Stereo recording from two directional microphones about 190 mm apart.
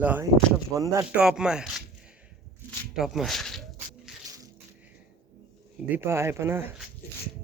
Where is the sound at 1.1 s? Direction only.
5° right (ahead or behind).